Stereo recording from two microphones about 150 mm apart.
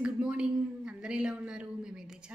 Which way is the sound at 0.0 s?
5° right (ahead or behind).